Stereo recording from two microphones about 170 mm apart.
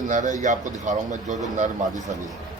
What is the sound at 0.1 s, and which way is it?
A man's voice, 45° right (ahead or behind).